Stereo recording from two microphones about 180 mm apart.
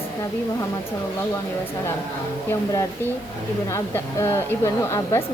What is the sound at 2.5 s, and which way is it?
A woman's voice, 20° left (ahead or behind).